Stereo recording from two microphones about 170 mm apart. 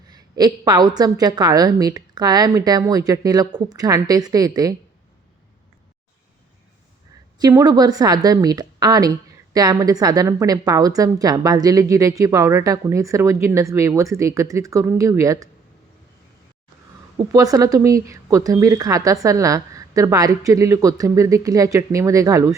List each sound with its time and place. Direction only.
0.1 s a woman's voice: 25° right (ahead or behind)
7.3 s a woman's voice: 25° right (ahead or behind)
17.3 s a woman's voice: 20° right (ahead or behind)